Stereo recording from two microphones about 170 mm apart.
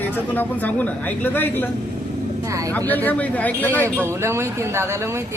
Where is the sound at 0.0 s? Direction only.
10° left (ahead or behind).